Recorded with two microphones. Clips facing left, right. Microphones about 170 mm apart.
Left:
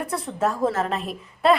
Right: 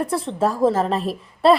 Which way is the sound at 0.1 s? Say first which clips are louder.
Right 3 dB; 30° right (ahead or behind).